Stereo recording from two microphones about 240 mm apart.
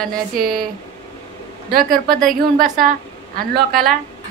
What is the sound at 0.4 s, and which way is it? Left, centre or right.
Speech, right.